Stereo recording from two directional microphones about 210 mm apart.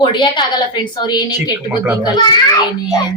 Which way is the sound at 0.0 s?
20° left (ahead or behind).